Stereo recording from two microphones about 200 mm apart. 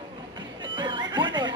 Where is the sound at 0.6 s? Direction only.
25° right (ahead or behind).